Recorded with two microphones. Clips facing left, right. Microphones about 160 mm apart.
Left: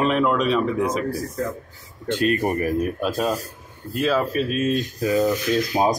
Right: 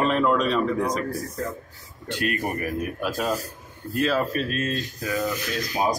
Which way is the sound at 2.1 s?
30° left (ahead or behind).